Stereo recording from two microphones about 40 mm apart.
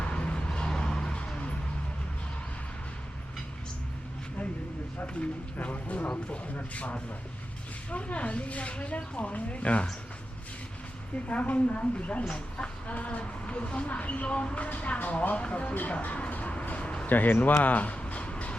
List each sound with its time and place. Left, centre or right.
0.0 s vehicle: left
5.5 s speech: left
11.3 s speech: left
12.9 s speech: left
15.4 s speech: left
15.6 s speech: left
15.9 s speech: left
16.3 s a sound: left
17.1 s speech: left